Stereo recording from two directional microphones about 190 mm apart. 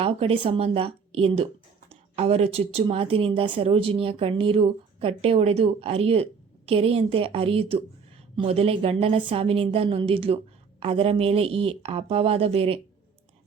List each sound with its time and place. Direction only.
0.0 s a woman's voice: 30° right (ahead or behind)